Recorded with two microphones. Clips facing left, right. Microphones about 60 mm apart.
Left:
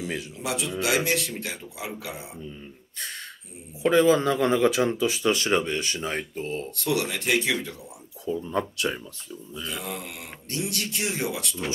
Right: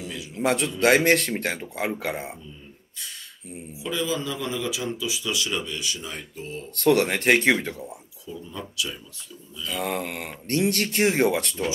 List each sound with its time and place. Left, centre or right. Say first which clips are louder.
0.0 s a man's voice: left 4 dB; left
0.4 s speech: right 8 dB; right
3.8 s speech: left 9 dB; left
6.7 s speech: right 9 dB; right
8.3 s speech: left 9 dB; left
9.7 s speech: right 7 dB; right